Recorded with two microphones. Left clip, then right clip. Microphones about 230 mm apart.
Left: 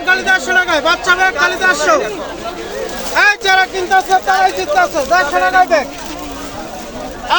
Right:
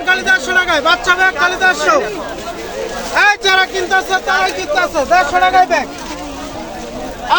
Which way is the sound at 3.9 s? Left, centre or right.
Right.